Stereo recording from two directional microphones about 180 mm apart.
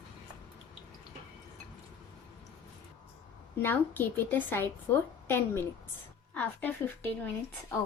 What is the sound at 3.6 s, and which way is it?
A woman's voice, 10° left (ahead or behind).